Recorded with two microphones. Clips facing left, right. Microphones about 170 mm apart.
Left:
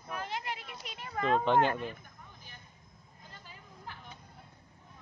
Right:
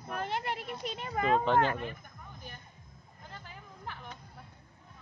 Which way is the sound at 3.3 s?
60° right (ahead or behind).